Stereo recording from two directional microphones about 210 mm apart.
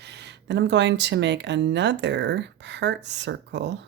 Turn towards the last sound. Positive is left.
turn(degrees=-55)  # may be behind; listen again after turning